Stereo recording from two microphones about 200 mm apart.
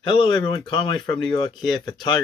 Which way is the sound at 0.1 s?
25° left (ahead or behind).